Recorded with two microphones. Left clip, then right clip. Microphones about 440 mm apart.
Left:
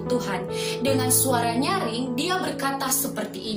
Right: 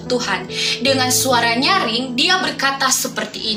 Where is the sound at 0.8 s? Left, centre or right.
Left.